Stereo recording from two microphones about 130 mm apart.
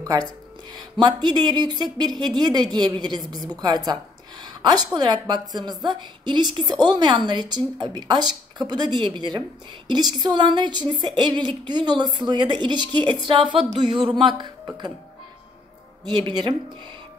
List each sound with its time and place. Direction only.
0.9 s speech: 35° right (ahead or behind)
16.1 s speech: 35° right (ahead or behind)